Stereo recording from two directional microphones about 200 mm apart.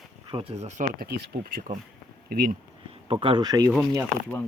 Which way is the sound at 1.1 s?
55° right (ahead or behind).